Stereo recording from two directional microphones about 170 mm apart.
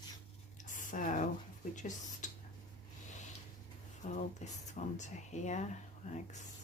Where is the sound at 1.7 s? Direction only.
45° left (ahead or behind).